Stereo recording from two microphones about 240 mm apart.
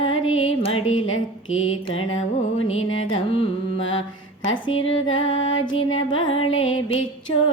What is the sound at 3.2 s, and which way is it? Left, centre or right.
Music, left.